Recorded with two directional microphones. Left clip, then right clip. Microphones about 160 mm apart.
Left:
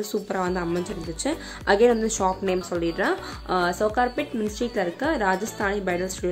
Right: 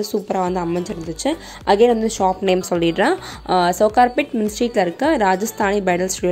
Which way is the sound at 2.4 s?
50° right (ahead or behind).